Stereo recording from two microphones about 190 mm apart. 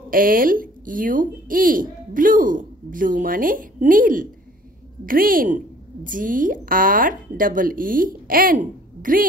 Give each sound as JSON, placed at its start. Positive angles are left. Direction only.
{"t": 0.1, "sound": "speech", "side_deg": -50}